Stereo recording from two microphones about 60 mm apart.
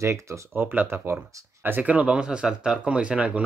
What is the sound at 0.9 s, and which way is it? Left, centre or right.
Speech, right.